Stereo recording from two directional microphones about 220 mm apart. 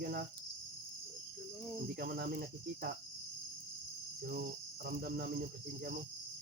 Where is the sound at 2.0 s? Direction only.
45° right (ahead or behind).